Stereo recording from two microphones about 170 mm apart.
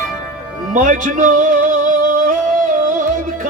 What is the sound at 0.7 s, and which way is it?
Music, 50° right (ahead or behind).